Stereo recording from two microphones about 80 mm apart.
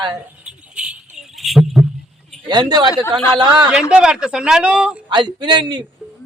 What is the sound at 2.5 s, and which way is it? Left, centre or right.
A man's voice, right.